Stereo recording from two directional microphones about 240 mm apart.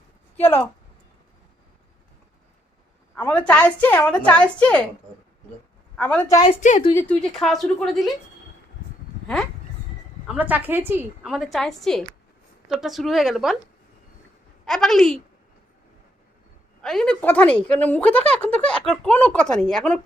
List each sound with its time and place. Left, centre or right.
3.2 s speech: centre
6.0 s a woman's voice: centre
6.4 s a woman's voice: left
7.1 s speech: centre
10.2 s speech: centre
14.6 s a woman's voice: centre
16.8 s speech: centre